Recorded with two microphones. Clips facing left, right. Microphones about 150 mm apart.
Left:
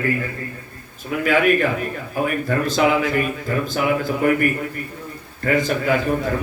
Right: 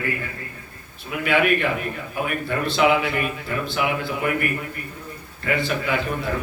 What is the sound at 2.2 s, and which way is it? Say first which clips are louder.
A man's voice: left 4 dB; 40° left (ahead or behind).